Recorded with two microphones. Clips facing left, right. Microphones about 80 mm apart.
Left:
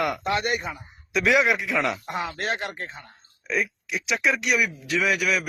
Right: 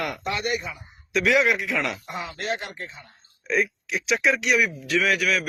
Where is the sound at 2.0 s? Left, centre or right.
Left.